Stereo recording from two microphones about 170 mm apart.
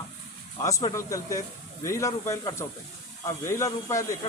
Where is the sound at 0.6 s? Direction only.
20° left (ahead or behind).